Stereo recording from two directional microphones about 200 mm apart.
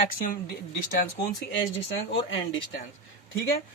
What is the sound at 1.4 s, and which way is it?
Speech, 70° left (ahead or behind).